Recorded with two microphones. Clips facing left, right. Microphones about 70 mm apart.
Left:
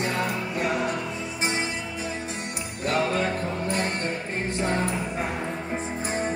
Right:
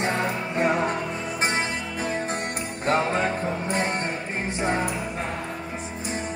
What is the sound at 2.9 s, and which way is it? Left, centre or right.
Music, right.